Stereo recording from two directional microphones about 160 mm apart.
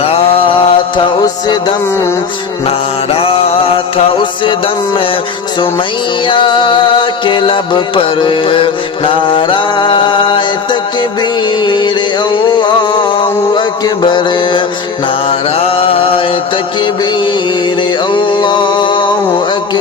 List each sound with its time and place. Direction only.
0.0 s music: 35° left (ahead or behind)
2.6 s mantra: 35° left (ahead or behind)
6.2 s mantra: 30° left (ahead or behind)
11.2 s music: 30° left (ahead or behind)
13.6 s mantra: 30° left (ahead or behind)
18.1 s a sound: 30° left (ahead or behind)